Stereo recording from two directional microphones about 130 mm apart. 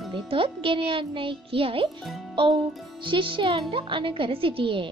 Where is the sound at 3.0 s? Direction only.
40° right (ahead or behind).